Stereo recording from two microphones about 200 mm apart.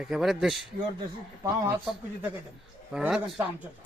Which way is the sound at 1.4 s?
15° right (ahead or behind).